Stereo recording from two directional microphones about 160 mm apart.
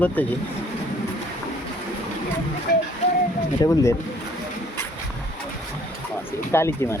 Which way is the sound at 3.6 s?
25° left (ahead or behind).